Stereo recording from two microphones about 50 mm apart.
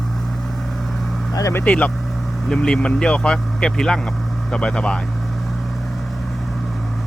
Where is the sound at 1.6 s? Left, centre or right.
Left.